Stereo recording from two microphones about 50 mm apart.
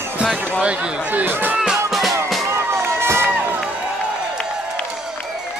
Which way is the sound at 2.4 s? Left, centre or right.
Right.